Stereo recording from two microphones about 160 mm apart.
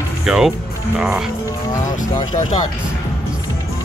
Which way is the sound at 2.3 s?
50° left (ahead or behind).